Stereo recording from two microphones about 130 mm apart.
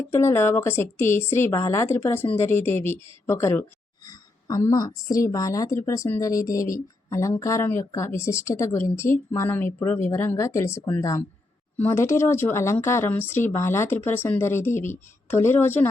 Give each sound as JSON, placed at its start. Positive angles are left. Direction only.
{"t": 0.1, "sound": "speech", "side_deg": 20}